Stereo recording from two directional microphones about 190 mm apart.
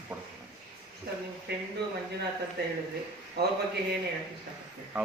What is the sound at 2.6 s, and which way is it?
Speech, 60° right (ahead or behind).